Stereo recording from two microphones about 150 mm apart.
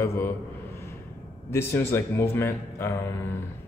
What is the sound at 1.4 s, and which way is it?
Speech, 15° left (ahead or behind).